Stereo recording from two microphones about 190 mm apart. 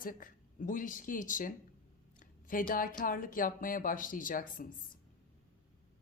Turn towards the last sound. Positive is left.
turn(degrees=45)  # may be behind; listen again after turning